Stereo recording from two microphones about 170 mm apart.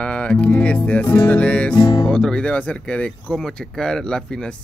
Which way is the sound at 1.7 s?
25° left (ahead or behind).